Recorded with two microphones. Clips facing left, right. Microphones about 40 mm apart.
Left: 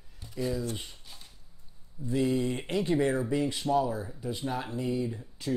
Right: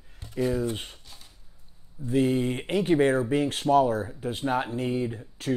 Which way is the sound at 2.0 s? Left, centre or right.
Right.